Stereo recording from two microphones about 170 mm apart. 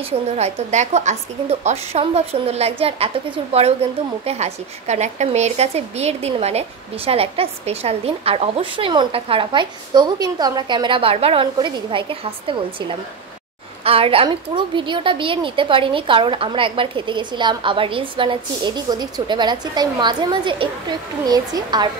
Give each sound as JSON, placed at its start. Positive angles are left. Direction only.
{"t": 0.4, "sound": "a woman's voice", "side_deg": -40}